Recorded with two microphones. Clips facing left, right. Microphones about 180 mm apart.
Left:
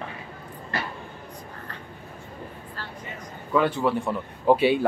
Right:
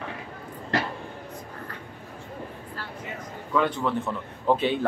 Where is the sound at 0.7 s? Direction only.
90° right.